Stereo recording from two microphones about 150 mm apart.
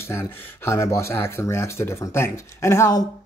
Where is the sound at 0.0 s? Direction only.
15° left (ahead or behind).